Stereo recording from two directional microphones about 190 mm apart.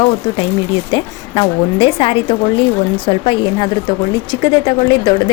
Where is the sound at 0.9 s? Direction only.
25° left (ahead or behind).